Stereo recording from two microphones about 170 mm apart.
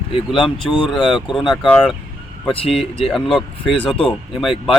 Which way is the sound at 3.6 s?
30° left (ahead or behind).